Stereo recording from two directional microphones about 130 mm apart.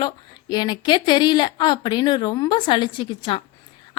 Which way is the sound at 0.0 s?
35° left (ahead or behind).